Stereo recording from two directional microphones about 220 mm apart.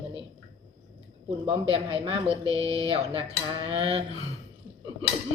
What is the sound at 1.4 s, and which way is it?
A woman's voice, 25° right (ahead or behind).